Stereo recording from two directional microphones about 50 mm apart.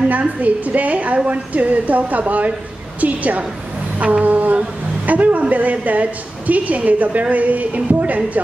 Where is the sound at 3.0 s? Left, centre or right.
Right.